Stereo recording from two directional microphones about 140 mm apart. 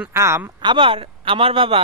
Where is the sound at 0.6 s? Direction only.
35° right (ahead or behind).